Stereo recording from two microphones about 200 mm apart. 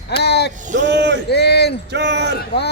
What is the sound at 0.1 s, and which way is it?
Speech, 55° left (ahead or behind).